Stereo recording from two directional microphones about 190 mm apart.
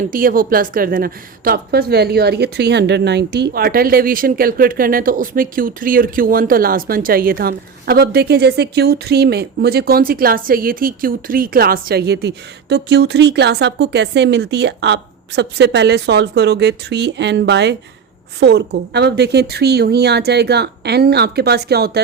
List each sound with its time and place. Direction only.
0.1 s a woman's voice: 50° right (ahead or behind)